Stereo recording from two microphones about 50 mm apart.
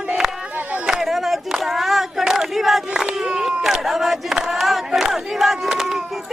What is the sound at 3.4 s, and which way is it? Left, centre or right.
Battle cry, centre.